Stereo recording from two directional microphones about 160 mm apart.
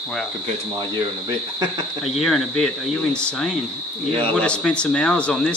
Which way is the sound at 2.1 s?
Centre (ahead or behind).